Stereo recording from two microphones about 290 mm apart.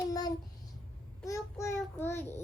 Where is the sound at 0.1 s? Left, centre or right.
Centre.